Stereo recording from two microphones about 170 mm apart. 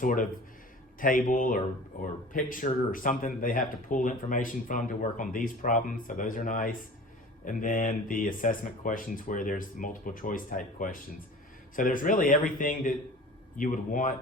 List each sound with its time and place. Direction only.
0.0 s speech: 50° left (ahead or behind)